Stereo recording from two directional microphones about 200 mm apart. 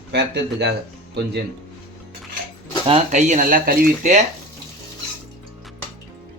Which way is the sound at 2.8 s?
30° right (ahead or behind).